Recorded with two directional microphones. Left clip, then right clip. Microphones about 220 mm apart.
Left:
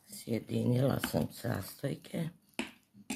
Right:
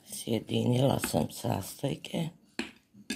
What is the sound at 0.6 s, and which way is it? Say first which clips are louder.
Speech: right 4 dB; 10° right (ahead or behind).